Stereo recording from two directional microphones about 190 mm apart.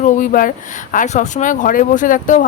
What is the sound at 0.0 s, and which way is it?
A woman's voice, 45° left (ahead or behind).